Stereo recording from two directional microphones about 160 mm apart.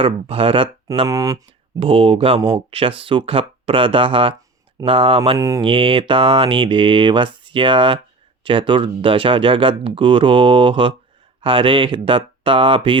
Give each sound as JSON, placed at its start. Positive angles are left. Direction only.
{"t": 0.0, "sound": "speech", "side_deg": -35}
{"t": 1.0, "sound": "speech", "side_deg": -20}
{"t": 1.8, "sound": "speech", "side_deg": -35}
{"t": 5.4, "sound": "speech", "side_deg": -20}
{"t": 5.6, "sound": "speech", "side_deg": -35}